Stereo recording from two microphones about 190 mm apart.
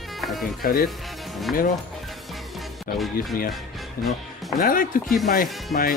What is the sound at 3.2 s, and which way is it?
Speech, 50° left (ahead or behind).